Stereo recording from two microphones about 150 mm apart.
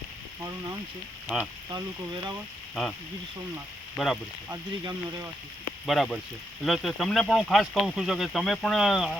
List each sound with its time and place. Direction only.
1.7 s speech: 30° right (ahead or behind)
2.8 s speech: centre (ahead or behind)
3.9 s speech: centre (ahead or behind)
4.4 s speech: 20° right (ahead or behind)
5.8 s speech: centre (ahead or behind)